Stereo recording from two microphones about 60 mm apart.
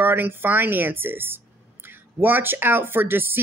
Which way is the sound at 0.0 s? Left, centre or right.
Right.